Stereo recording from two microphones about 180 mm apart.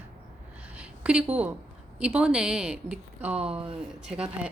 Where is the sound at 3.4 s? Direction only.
30° right (ahead or behind).